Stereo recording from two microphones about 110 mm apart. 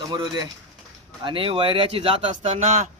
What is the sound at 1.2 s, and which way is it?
Speech, 50° right (ahead or behind).